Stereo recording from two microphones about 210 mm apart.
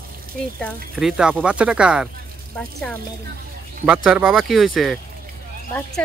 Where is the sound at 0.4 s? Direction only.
5° left (ahead or behind).